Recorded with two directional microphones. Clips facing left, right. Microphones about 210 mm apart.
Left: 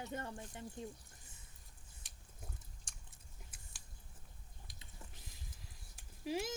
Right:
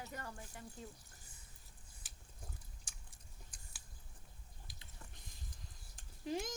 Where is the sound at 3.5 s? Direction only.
5° left (ahead or behind).